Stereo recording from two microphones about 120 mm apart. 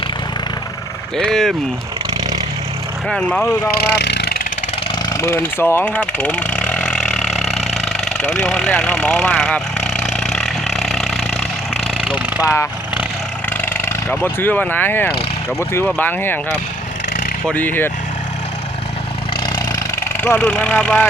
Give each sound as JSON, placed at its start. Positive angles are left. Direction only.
{"t": 1.1, "sound": "speech", "side_deg": 5}
{"t": 3.1, "sound": "speech", "side_deg": 5}
{"t": 5.0, "sound": "speech", "side_deg": 25}
{"t": 7.3, "sound": "vehicle", "side_deg": 65}
{"t": 8.2, "sound": "speech", "side_deg": 80}
{"t": 8.4, "sound": "speech", "side_deg": 5}
{"t": 10.3, "sound": "vehicle", "side_deg": 5}
{"t": 12.4, "sound": "speech", "side_deg": 30}
{"t": 13.7, "sound": "speech", "side_deg": 15}
{"t": 17.4, "sound": "speech", "side_deg": 15}
{"t": 20.2, "sound": "speech", "side_deg": 15}